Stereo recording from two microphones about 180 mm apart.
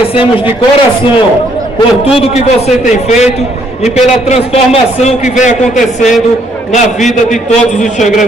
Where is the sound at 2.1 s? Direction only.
35° left (ahead or behind).